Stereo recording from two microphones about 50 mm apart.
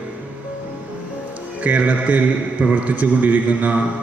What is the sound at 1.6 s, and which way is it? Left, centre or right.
Music, right.